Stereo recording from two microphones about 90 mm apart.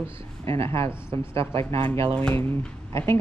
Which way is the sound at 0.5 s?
90° right.